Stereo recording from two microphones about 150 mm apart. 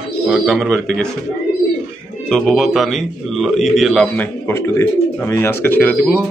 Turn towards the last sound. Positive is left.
turn(degrees=10)  # may be behind; listen again after turning